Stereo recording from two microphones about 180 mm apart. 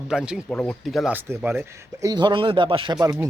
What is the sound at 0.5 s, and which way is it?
A man's voice, 5° left (ahead or behind).